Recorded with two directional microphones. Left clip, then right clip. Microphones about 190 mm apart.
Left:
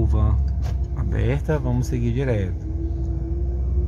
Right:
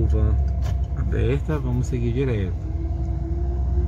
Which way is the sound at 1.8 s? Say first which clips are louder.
Even; 40° left (ahead or behind).